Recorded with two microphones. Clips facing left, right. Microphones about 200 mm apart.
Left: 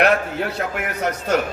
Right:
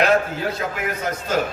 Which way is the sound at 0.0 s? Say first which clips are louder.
Even; 65° left (ahead or behind).